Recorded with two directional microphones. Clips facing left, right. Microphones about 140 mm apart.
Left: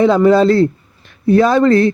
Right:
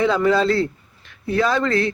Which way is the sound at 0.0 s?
35° left (ahead or behind).